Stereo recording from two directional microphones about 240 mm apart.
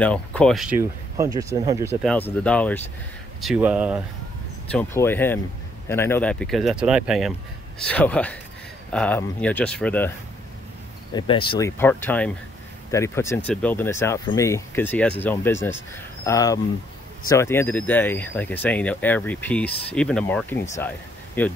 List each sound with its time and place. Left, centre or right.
0.0 s speech: centre
2.0 s speech: centre
4.6 s speech: centre
11.1 s speech: centre
11.8 s speech: centre